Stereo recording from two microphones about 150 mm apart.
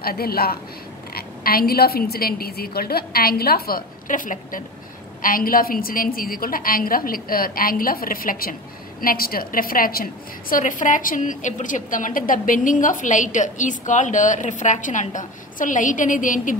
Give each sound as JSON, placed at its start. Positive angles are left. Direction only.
{"t": 0.0, "sound": "a woman's voice", "side_deg": 90}
{"t": 10.5, "sound": "a woman's voice", "side_deg": 60}